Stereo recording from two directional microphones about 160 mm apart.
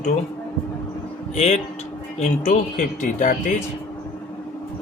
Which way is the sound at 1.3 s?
45° left (ahead or behind).